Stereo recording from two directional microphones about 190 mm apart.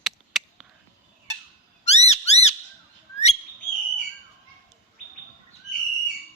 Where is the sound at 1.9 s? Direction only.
35° left (ahead or behind).